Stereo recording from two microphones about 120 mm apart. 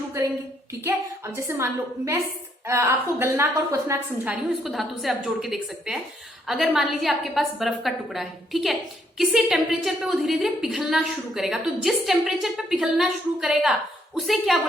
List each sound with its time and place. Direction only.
1.4 s a woman's voice: 25° right (ahead or behind)
4.6 s a woman's voice: centre (ahead or behind)